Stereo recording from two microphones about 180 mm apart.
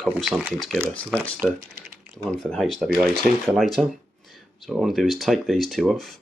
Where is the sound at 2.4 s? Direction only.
Centre (ahead or behind).